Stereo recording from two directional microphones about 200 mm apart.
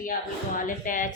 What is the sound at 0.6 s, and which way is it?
Speech, 40° left (ahead or behind).